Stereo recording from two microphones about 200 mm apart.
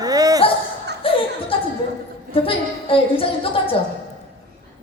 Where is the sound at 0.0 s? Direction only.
20° right (ahead or behind).